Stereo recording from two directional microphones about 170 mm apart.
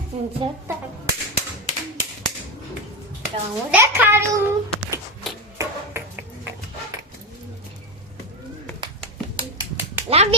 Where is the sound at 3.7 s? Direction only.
10° right (ahead or behind).